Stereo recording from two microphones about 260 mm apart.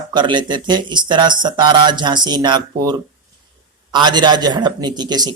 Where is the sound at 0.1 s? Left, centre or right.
Centre.